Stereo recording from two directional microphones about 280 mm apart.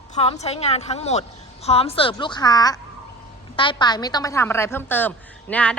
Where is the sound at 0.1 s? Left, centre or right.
Left.